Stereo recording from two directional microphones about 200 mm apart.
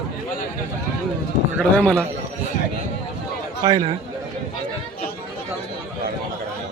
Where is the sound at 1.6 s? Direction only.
5° left (ahead or behind).